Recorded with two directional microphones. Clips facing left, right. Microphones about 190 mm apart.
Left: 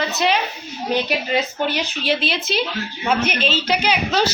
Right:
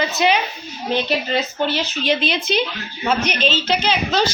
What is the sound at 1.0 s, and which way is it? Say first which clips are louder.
A woman's voice: even; 15° left (ahead or behind).